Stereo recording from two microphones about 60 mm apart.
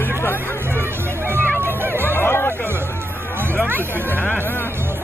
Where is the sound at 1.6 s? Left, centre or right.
Right.